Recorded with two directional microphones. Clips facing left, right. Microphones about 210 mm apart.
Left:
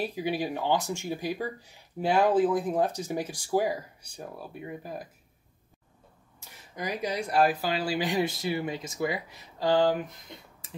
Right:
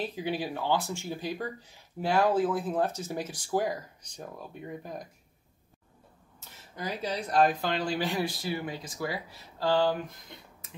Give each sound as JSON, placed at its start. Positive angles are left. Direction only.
{"t": 0.0, "sound": "speech", "side_deg": 10}
{"t": 6.7, "sound": "speech", "side_deg": 15}
{"t": 10.6, "sound": "a sound", "side_deg": 30}